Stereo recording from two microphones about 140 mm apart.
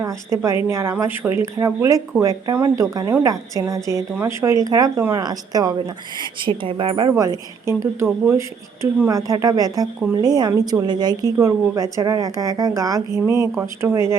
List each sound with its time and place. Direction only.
0.0 s a woman's voice: 20° right (ahead or behind); by 7.1 s 35° right (ahead or behind)
7.2 s a woman's voice: 25° right (ahead or behind)